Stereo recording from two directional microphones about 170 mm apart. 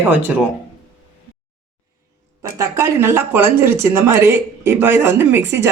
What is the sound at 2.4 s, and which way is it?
Speech, 15° right (ahead or behind).